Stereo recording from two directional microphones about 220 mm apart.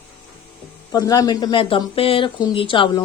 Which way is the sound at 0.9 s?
15° left (ahead or behind).